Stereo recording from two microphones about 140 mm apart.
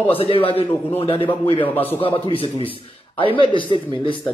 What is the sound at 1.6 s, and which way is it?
Speech, 15° left (ahead or behind).